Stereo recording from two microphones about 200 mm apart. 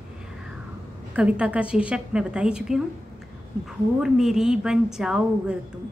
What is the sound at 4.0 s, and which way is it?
A woman's voice, centre (ahead or behind).